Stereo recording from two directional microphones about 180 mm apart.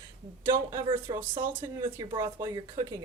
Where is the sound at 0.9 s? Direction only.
25° right (ahead or behind).